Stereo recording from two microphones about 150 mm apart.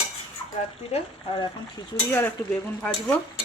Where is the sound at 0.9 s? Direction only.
40° left (ahead or behind).